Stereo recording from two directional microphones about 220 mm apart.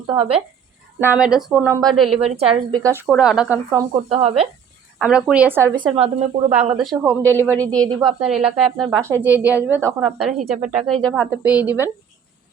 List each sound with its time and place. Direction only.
0.1 s a woman's voice: 25° right (ahead or behind)
0.9 s a woman's voice: 5° right (ahead or behind)
2.1 s a woman's voice: 25° right (ahead or behind)
2.7 s a woman's voice: 10° right (ahead or behind)
4.1 s a woman's voice: 25° right (ahead or behind)
4.9 s a woman's voice: 5° right (ahead or behind); by 6.7 s 30° right (ahead or behind)
6.9 s a woman's voice: 10° right (ahead or behind)
7.6 s a woman's voice: 5° left (ahead or behind)